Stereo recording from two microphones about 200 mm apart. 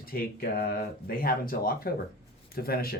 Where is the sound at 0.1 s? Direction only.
50° left (ahead or behind).